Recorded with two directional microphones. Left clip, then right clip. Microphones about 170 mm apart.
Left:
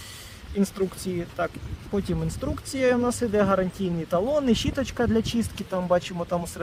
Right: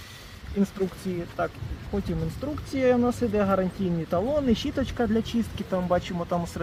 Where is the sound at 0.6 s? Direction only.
55° left (ahead or behind).